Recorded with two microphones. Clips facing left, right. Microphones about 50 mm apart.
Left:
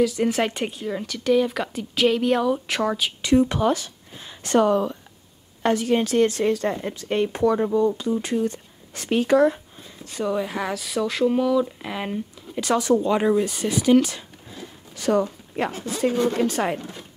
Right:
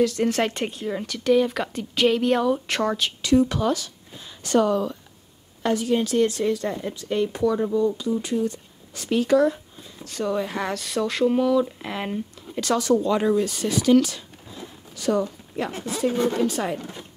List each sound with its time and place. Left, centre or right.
0.0 s speech: centre
3.2 s speech: left
5.6 s a woman's voice: left
10.0 s speech: centre
10.3 s speech: centre
12.5 s speech: centre
15.0 s speech: left
15.7 s speech: right
16.3 s a woman's voice: left